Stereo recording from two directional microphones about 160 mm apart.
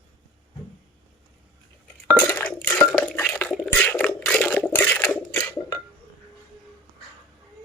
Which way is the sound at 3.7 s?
10° left (ahead or behind).